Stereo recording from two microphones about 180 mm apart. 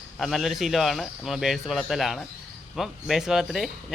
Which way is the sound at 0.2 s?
Centre (ahead or behind).